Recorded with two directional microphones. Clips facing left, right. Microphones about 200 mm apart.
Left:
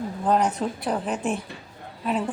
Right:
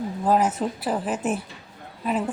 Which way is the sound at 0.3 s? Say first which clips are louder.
Right 1 dB; 5° right (ahead or behind).